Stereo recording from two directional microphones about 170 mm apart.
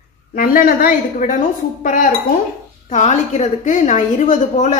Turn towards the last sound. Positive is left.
turn(degrees=45)  # may be behind; listen again after turning